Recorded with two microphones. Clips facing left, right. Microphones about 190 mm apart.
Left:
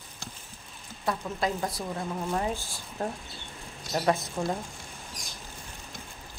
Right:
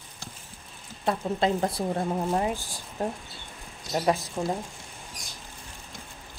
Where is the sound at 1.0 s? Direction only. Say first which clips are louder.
Right 4 dB; 30° right (ahead or behind).